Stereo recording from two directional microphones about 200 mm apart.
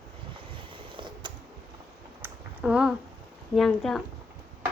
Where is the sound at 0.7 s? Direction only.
25° right (ahead or behind).